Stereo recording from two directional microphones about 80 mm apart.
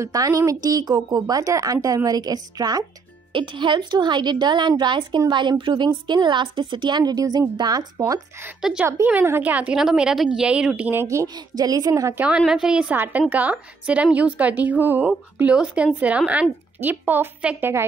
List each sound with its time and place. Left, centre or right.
0.0 s a woman's voice: right
3.3 s a woman's voice: right
8.5 s speech: centre
9.0 s a woman's voice: right
9.4 s speech: centre
10.9 s speech: right
11.2 s a woman's voice: right
12.2 s speech: centre
12.9 s a woman's voice: right
16.9 s a woman's voice: right